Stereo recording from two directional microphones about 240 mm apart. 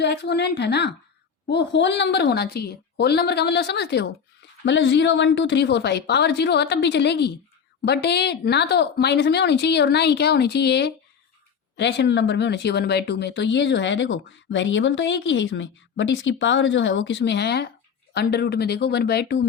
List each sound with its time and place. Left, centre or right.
0.0 s speech: left